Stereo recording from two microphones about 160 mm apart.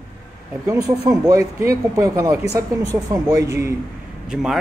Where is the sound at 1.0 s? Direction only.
20° right (ahead or behind).